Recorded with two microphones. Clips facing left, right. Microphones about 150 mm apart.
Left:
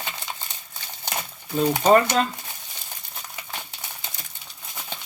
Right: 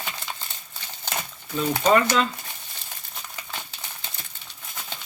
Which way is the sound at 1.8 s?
40° left (ahead or behind).